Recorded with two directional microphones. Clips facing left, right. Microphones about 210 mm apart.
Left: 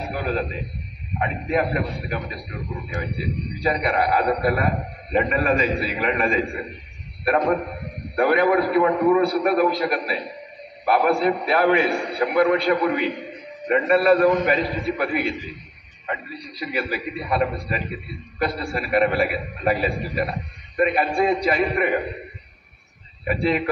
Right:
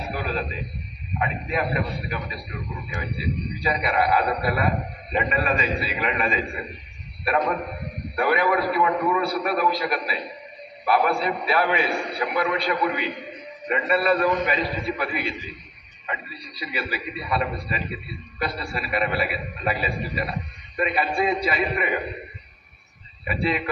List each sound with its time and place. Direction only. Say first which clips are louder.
0.1 s a sound: left 3 dB; 50° left (ahead or behind)
1.5 s a man's voice: left 5 dB; 50° left (ahead or behind)
23.2 s a man's voice: left 4 dB; 50° left (ahead or behind)